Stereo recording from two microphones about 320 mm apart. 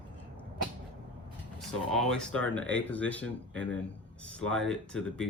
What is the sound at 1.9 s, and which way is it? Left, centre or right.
Speech, centre.